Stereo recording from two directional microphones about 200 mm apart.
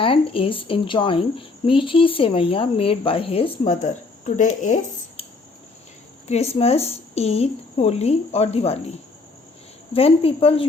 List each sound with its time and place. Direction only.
0.0 s speech: 25° left (ahead or behind)
6.2 s a woman's voice: 30° left (ahead or behind)
9.9 s speech: 30° left (ahead or behind)